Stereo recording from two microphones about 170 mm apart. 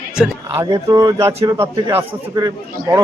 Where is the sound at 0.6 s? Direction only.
20° right (ahead or behind).